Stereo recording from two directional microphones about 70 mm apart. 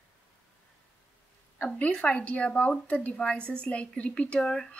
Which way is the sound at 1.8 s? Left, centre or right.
Centre.